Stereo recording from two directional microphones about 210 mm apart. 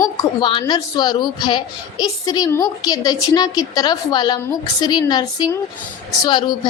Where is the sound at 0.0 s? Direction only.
20° left (ahead or behind).